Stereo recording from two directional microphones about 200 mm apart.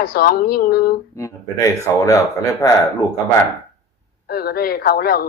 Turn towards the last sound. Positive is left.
turn(degrees=50)  # may be behind; listen again after turning